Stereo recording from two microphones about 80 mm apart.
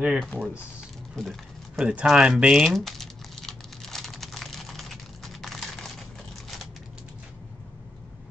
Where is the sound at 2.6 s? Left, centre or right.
Centre.